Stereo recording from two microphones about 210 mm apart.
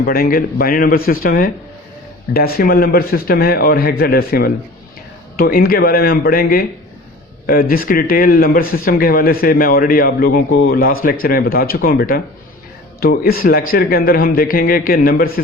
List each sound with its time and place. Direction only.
0.0 s speech: 45° left (ahead or behind)